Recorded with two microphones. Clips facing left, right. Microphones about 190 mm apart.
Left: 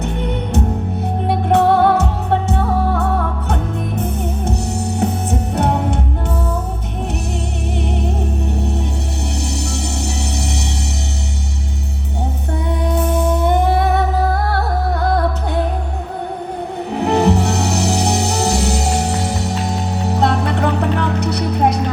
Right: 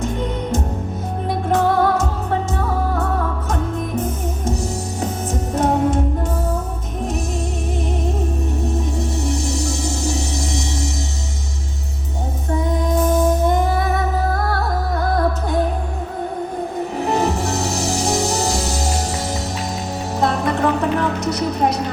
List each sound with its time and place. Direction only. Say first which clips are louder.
1.3 s music: left 4 dB; 65° left (ahead or behind)
4.9 s music: left 5 dB; 65° left (ahead or behind)
8.0 s music: left 1 dB; 65° left (ahead or behind)
12.5 s music: right 2 dB; 65° left (ahead or behind)
17.0 s music: left 5 dB; 65° left (ahead or behind)